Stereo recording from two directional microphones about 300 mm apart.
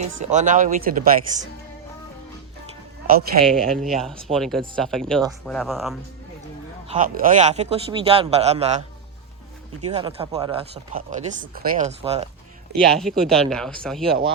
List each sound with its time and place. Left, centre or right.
0.0 s speech: right
3.1 s speech: right
3.4 s speech: centre
6.8 s speech: right
9.8 s speech: centre
12.7 s speech: centre